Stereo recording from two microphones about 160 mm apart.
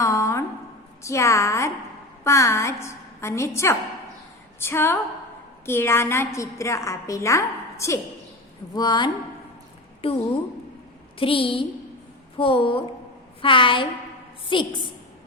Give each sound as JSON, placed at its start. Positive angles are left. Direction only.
{"t": 0.0, "sound": "a sound", "side_deg": 20}
{"t": 1.0, "sound": "a woman's voice", "side_deg": 20}
{"t": 10.0, "sound": "a woman's voice", "side_deg": 35}
{"t": 11.2, "sound": "a woman's voice", "side_deg": 35}